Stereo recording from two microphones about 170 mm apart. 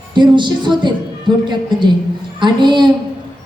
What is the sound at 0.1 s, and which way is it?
Speech, 25° right (ahead or behind).